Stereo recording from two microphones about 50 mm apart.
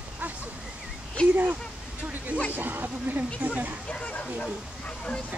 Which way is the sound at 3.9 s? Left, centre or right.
Left.